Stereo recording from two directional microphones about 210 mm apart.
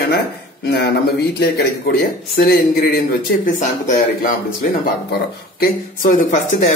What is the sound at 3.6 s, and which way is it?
Speech, 35° left (ahead or behind).